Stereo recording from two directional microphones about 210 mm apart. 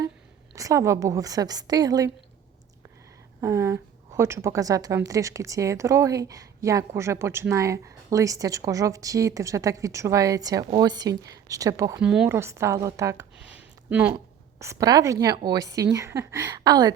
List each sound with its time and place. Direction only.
0.5 s a woman's voice: 15° right (ahead or behind)
3.4 s a woman's voice: 15° right (ahead or behind)